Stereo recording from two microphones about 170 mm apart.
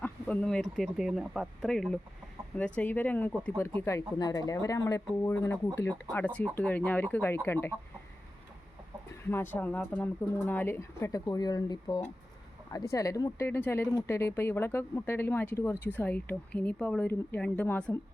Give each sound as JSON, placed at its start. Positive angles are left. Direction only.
{"t": 0.0, "sound": "speech", "side_deg": 5}
{"t": 9.3, "sound": "speech", "side_deg": 10}